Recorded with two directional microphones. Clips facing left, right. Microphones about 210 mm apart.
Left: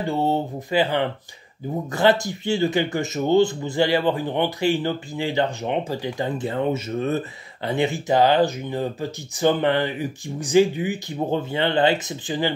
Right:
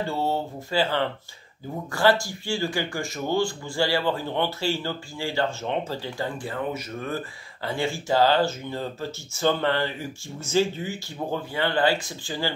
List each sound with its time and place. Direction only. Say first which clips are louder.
0.0 s speech: left 4 dB; 20° left (ahead or behind)